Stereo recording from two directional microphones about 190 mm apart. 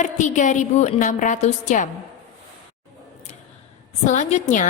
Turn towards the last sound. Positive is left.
turn(degrees=40)  # may be behind; listen again after turning